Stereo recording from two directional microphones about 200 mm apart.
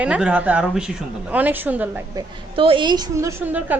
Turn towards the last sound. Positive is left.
turn(degrees=-10)  # may be behind; listen again after turning